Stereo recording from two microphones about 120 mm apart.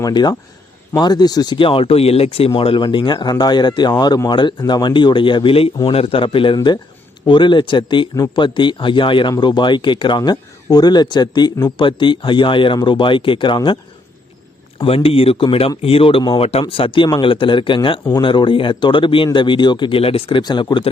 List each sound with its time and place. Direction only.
0.0 s speech: 35° left (ahead or behind)
1.5 s speech: 50° left (ahead or behind)
14.8 s speech: 55° left (ahead or behind)
20.4 s speech: 35° left (ahead or behind)